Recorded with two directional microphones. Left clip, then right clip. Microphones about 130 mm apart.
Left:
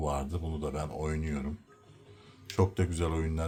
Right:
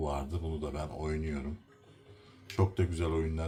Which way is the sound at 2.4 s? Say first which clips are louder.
Left 2 dB; 45° left (ahead or behind).